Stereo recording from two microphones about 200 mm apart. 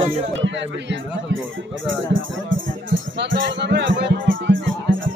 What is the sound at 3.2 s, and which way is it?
Music, 60° right (ahead or behind).